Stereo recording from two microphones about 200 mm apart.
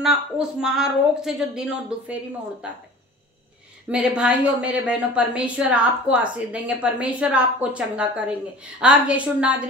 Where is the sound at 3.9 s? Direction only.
5° right (ahead or behind).